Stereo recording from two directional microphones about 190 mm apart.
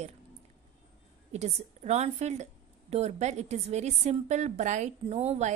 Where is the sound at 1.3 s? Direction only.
35° right (ahead or behind).